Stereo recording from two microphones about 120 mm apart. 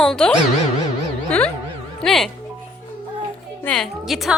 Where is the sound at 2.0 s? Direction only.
Centre (ahead or behind).